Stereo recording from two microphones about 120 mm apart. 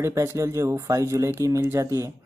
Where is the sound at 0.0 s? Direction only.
20° right (ahead or behind).